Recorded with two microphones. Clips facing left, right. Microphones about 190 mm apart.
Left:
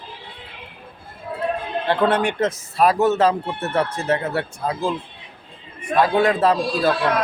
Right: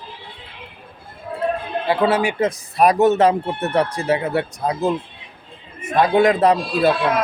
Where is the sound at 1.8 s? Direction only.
5° right (ahead or behind).